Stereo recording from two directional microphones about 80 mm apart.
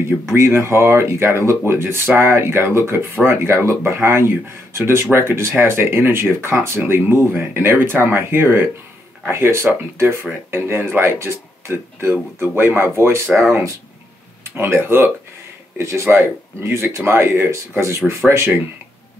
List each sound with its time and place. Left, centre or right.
0.0 s speech: right